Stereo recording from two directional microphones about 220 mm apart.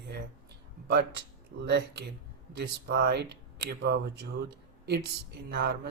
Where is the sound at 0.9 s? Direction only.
50° right (ahead or behind).